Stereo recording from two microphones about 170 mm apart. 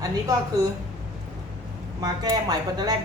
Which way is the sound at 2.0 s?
20° right (ahead or behind).